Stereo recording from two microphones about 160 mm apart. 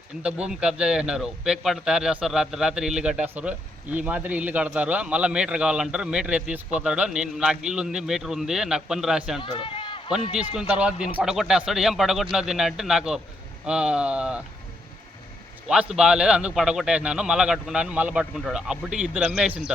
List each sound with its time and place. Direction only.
0.2 s a man's voice: 5° right (ahead or behind)
9.4 s a sound: 35° left (ahead or behind)
10.3 s a man's voice: 5° right (ahead or behind)
15.6 s a man's voice: 5° right (ahead or behind)